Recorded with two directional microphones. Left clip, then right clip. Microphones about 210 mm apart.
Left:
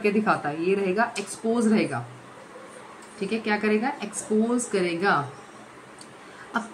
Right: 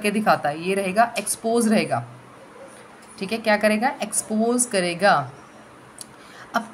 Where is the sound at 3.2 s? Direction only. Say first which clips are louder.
Right 6 dB; 55° right (ahead or behind).